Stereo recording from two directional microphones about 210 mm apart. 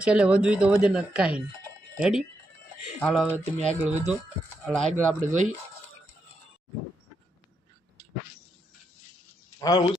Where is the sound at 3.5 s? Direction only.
35° right (ahead or behind).